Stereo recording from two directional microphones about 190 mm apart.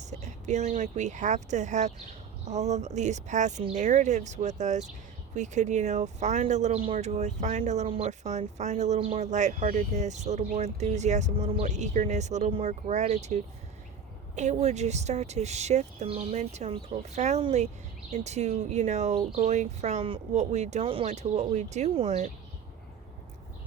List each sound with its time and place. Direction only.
0.0 s speech: 35° right (ahead or behind)